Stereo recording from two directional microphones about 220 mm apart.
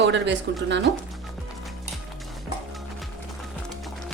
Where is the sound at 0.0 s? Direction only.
55° right (ahead or behind).